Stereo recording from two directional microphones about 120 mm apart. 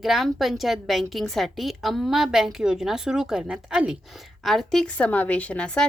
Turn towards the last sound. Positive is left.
turn(degrees=10)  # may be behind; listen again after turning